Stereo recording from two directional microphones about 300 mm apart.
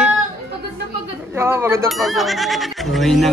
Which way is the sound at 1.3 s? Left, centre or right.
Centre.